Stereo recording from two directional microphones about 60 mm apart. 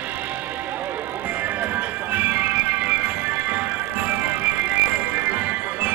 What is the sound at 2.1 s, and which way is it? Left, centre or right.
Music, right.